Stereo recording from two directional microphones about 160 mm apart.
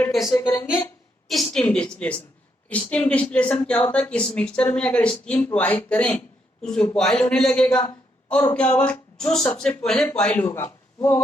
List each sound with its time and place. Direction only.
0.3 s speech: 20° left (ahead or behind)
1.3 s a man's voice: 5° left (ahead or behind)